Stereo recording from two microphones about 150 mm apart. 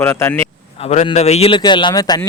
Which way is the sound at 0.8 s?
40° left (ahead or behind).